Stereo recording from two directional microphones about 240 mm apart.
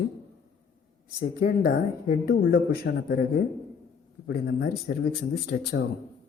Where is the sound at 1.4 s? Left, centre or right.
Left.